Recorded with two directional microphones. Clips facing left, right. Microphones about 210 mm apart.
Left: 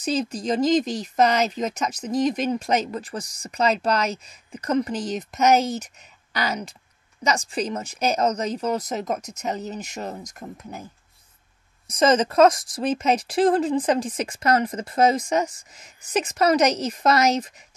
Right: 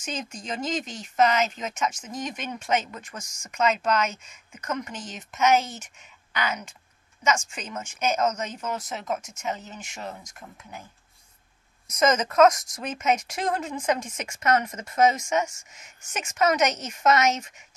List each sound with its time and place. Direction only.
0.0 s speech: 35° left (ahead or behind)
11.9 s speech: 30° left (ahead or behind)